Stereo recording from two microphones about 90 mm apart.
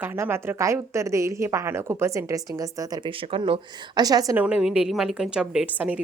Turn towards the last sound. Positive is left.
turn(degrees=-15)  # may be behind; listen again after turning